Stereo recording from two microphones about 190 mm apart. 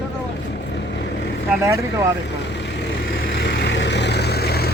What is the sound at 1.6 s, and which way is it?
Speech, 15° right (ahead or behind).